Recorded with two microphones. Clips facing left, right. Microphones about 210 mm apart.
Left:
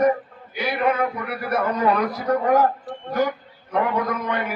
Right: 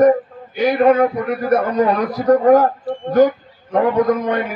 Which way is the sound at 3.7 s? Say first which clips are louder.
Right 8 dB; 40° right (ahead or behind).